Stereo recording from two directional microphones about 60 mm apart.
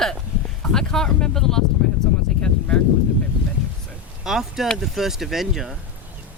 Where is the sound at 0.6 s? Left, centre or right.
Centre.